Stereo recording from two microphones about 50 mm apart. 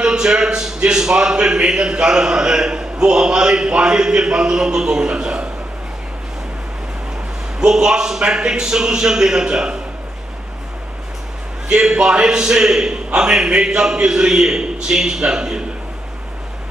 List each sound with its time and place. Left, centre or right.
0.0 s a man's voice: centre
7.6 s a man's voice: centre
11.7 s a man's voice: centre